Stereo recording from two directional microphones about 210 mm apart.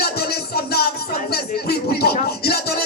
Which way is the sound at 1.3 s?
50° left (ahead or behind).